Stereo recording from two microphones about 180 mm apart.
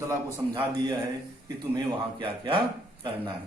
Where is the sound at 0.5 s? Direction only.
25° right (ahead or behind).